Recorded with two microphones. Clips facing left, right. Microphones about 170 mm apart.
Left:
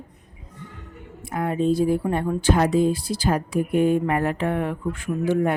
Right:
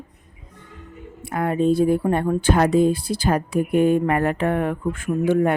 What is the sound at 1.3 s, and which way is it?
Speech, 65° right (ahead or behind).